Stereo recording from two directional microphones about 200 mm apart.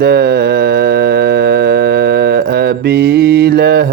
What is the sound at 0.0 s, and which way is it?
Music, 55° right (ahead or behind).